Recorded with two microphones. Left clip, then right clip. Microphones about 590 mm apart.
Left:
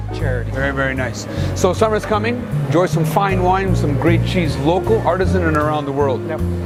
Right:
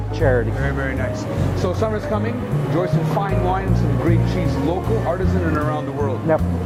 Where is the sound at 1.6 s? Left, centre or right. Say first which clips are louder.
Left 7 dB; left.